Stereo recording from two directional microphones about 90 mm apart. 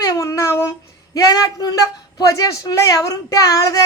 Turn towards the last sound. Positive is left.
turn(degrees=40)  # may be behind; listen again after turning